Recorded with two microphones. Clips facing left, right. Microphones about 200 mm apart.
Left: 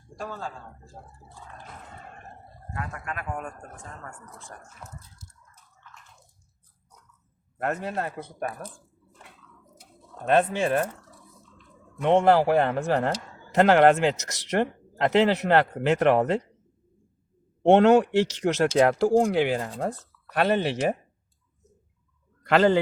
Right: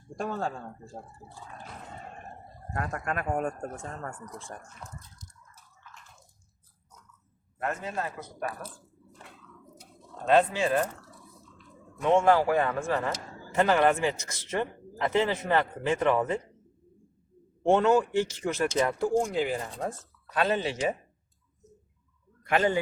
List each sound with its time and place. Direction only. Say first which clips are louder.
2.7 s speech: right 3 dB; 45° right (ahead or behind)
7.6 s a man's voice: left 4 dB; 65° left (ahead or behind)
10.2 s a man's voice: left 1 dB; 55° left (ahead or behind)
12.0 s speech: left 3 dB; 65° left (ahead or behind)
17.6 s speech: left 5 dB; 70° left (ahead or behind)
22.4 s a man's voice: left 6 dB; 80° left